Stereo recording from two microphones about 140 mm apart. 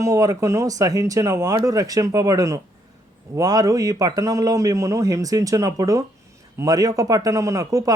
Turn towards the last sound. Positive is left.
turn(degrees=-25)  # may be behind; listen again after turning